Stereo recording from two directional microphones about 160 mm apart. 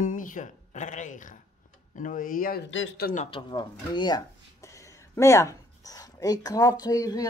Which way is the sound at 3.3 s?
30° left (ahead or behind).